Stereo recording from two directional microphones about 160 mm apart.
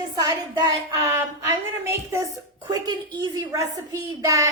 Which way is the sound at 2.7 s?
25° right (ahead or behind).